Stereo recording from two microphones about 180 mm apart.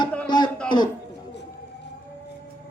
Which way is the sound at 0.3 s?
25° left (ahead or behind).